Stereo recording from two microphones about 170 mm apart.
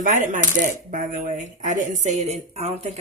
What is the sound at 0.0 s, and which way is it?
Coin, 50° right (ahead or behind).